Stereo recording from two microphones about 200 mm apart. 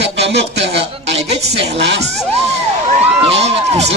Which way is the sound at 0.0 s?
60° right (ahead or behind).